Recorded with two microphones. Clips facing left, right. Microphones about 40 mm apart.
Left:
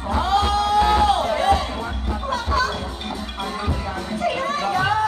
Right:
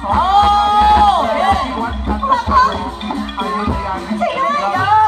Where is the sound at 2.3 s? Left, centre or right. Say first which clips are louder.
Right 10 dB; right.